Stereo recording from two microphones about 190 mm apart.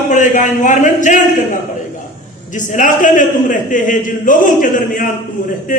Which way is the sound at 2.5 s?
40° left (ahead or behind).